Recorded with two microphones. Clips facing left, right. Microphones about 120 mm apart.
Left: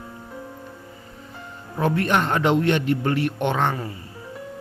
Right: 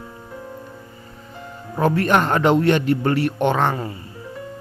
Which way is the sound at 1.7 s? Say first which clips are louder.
Right 3 dB; 40° right (ahead or behind).